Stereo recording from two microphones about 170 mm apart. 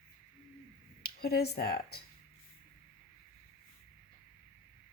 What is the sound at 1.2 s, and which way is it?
Speech, 65° left (ahead or behind).